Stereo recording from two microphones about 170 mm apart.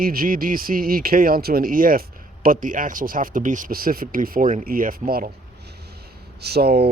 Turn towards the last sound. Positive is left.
turn(degrees=-70)  # may be behind; listen again after turning